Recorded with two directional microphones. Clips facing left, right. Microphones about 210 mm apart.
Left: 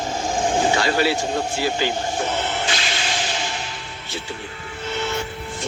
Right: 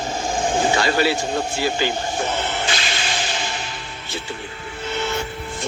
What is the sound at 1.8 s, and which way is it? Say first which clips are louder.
Whip: even; 50° right (ahead or behind).